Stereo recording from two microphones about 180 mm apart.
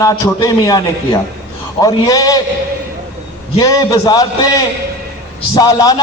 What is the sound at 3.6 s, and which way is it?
Speech, 20° left (ahead or behind).